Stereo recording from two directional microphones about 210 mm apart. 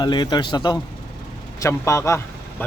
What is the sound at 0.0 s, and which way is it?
A man's voice, 20° left (ahead or behind).